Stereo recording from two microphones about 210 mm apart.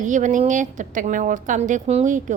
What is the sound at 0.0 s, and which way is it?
Speech, 35° right (ahead or behind).